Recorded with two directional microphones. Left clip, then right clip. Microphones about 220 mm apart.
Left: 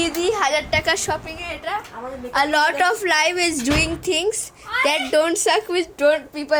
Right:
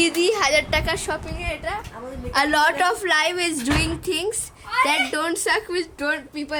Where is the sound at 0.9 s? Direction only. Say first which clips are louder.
Left 4 dB; 10° left (ahead or behind).